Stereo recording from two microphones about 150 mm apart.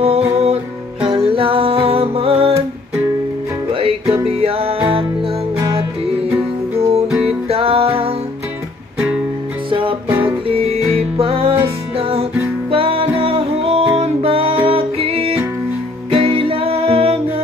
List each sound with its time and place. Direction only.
0.0 s music: 40° right (ahead or behind)
3.7 s music: 40° right (ahead or behind)
6.3 s music: 15° right (ahead or behind)
7.1 s music: 5° right (ahead or behind)
7.4 s music: 40° right (ahead or behind)
9.7 s music: 35° right (ahead or behind)
10.0 s music: 15° right (ahead or behind)
10.5 s music: 40° right (ahead or behind)